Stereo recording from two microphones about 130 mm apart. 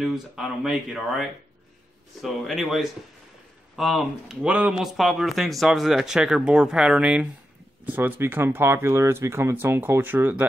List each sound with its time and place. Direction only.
0.0 s speech: centre (ahead or behind)